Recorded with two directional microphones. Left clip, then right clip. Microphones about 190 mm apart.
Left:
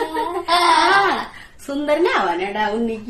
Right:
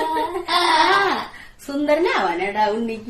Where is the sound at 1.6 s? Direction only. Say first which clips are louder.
Left 1 dB; 20° left (ahead or behind).